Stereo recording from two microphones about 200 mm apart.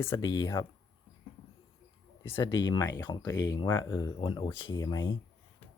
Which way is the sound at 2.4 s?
20° left (ahead or behind).